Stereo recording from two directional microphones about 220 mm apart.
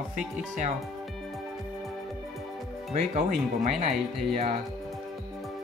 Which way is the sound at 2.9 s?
30° right (ahead or behind).